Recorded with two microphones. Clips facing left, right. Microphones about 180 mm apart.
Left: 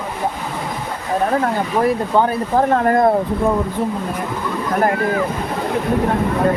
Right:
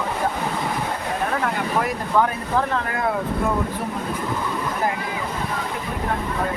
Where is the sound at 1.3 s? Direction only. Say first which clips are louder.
Left 5 dB; 35° left (ahead or behind).